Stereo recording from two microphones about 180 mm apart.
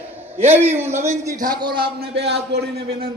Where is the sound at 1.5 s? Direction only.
25° right (ahead or behind).